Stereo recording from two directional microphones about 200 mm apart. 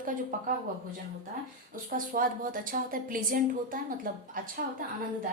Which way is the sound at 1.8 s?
45° right (ahead or behind).